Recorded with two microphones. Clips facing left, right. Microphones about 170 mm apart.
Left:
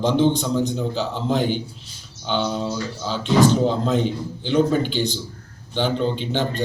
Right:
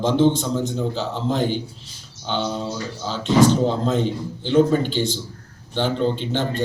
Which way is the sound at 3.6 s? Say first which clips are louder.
Even; centre (ahead or behind).